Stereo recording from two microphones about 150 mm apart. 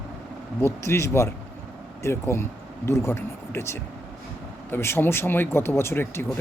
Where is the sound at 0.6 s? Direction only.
20° left (ahead or behind).